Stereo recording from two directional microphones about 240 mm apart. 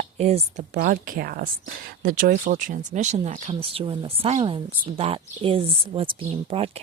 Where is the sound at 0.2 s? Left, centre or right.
Right.